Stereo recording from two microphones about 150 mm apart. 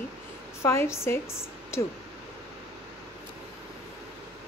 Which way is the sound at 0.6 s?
20° left (ahead or behind).